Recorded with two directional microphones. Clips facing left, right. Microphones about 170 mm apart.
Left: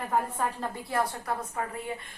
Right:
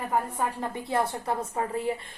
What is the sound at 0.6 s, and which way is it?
A woman's voice, 25° right (ahead or behind).